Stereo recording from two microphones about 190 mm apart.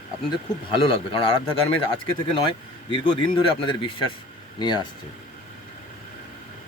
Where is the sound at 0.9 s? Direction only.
30° left (ahead or behind).